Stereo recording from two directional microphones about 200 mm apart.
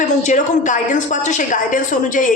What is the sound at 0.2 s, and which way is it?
A woman's voice, 35° left (ahead or behind).